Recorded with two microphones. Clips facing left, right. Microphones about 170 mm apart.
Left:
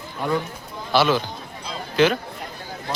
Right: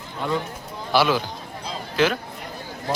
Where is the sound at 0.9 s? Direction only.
10° right (ahead or behind).